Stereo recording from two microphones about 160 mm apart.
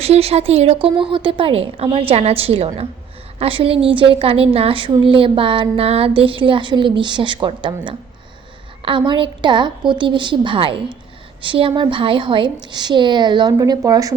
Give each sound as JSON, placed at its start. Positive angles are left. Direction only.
{"t": 0.0, "sound": "a woman's voice", "side_deg": -40}